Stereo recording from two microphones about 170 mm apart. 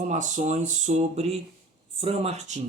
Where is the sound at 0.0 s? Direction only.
45° right (ahead or behind).